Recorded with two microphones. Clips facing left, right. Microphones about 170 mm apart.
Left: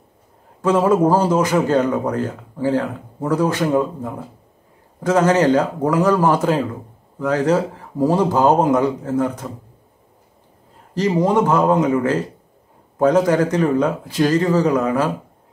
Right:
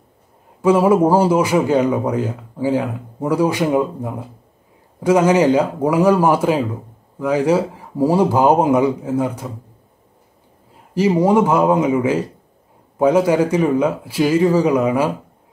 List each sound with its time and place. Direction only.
0.6 s speech: 10° right (ahead or behind)
11.0 s speech: 10° right (ahead or behind)